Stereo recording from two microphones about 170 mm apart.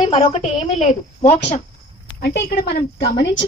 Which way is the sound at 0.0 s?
30° left (ahead or behind).